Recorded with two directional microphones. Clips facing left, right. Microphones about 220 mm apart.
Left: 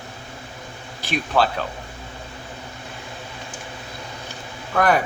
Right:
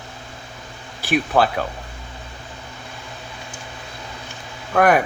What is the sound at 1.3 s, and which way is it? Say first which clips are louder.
Speech: right 1 dB; 35° right (ahead or behind).